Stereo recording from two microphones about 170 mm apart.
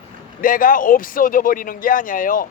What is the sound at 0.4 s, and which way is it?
Speech, 55° left (ahead or behind).